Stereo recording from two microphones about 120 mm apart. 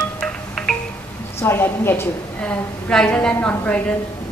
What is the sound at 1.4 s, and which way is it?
A woman's voice, 20° left (ahead or behind).